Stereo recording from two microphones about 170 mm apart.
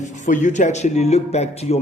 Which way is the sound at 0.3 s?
45° left (ahead or behind).